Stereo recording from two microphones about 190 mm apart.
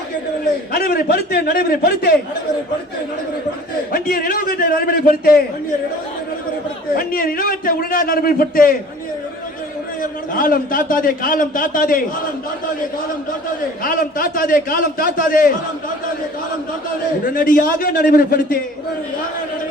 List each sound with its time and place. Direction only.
0.7 s a man's voice: 50° left (ahead or behind)
3.9 s a man's voice: 50° left (ahead or behind)
6.9 s a man's voice: 50° left (ahead or behind)
10.0 s a man's voice: 45° left (ahead or behind)
13.8 s a man's voice: 50° left (ahead or behind)
17.3 s a man's voice: 50° left (ahead or behind)